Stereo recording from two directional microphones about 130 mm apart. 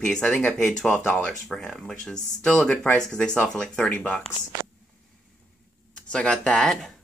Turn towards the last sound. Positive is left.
turn(degrees=5)  # may be behind; listen again after turning